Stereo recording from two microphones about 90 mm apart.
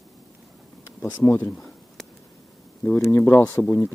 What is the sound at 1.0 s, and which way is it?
Speech, 30° left (ahead or behind).